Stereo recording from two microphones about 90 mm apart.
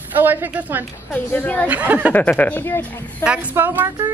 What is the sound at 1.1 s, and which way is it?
Speech, 20° left (ahead or behind).